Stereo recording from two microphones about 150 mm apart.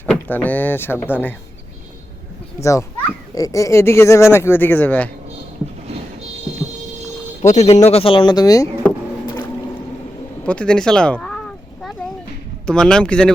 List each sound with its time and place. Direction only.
0.1 s speech: 10° left (ahead or behind)
2.6 s a child's voice: 20° left (ahead or behind)
7.4 s speech: 50° left (ahead or behind); by 8.7 s 20° left (ahead or behind)
10.4 s a sound: 5° left (ahead or behind)
12.6 s a man's voice: 5° left (ahead or behind)